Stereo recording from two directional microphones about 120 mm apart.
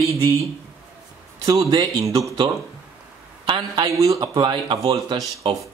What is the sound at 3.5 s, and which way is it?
Speech, 40° right (ahead or behind).